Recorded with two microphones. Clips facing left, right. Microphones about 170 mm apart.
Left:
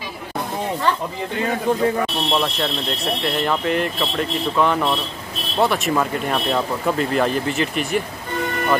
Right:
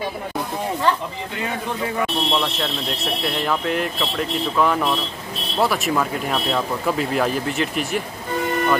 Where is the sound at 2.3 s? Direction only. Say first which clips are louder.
Left 2 dB; centre (ahead or behind).